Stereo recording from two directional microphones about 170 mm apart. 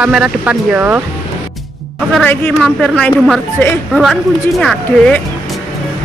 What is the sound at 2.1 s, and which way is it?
A woman's voice, 5° left (ahead or behind).